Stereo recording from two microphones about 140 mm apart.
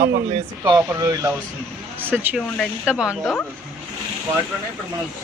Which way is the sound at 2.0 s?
15° right (ahead or behind).